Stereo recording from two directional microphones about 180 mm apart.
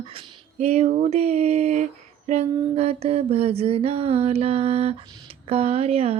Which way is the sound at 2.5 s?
30° right (ahead or behind).